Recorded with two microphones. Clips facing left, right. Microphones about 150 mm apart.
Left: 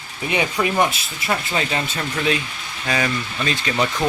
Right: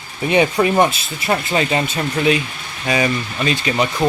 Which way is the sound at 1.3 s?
20° right (ahead or behind).